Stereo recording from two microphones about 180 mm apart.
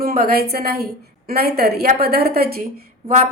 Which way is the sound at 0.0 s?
55° right (ahead or behind).